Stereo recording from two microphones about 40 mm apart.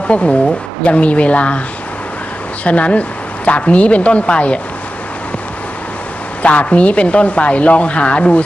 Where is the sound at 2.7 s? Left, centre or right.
Left.